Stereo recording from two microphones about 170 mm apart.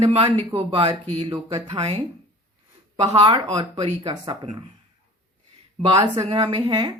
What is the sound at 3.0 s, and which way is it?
Speech, 30° right (ahead or behind).